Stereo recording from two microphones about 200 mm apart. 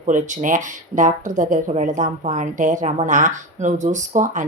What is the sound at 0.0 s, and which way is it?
Speech, 40° right (ahead or behind).